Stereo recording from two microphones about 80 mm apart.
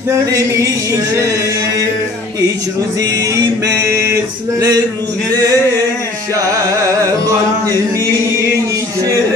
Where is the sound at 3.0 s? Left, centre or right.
Right.